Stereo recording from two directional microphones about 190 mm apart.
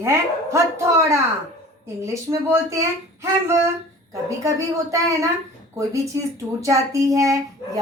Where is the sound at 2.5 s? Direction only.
15° right (ahead or behind).